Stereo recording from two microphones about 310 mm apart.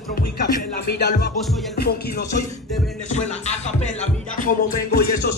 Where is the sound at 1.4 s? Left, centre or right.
Centre.